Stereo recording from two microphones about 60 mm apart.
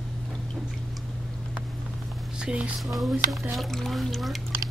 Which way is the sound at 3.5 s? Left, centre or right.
Centre.